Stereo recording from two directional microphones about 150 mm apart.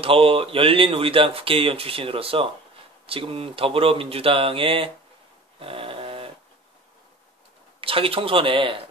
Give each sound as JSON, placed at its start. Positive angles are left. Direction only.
{"t": 0.0, "sound": "speech", "side_deg": -40}
{"t": 5.6, "sound": "a sound", "side_deg": -35}
{"t": 7.8, "sound": "speech", "side_deg": -35}